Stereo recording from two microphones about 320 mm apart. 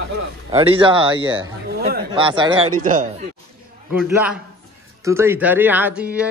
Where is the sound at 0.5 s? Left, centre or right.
Centre.